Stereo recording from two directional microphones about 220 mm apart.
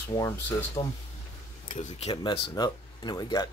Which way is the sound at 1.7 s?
30° left (ahead or behind).